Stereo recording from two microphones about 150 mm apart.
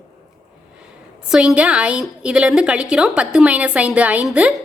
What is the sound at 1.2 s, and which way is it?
A woman's voice, 5° right (ahead or behind).